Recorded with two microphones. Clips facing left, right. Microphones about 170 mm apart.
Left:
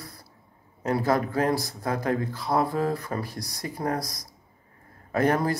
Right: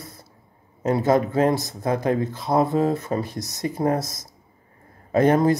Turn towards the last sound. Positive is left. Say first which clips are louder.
# right 6 dB
turn(degrees=-20)  # may be behind; listen again after turning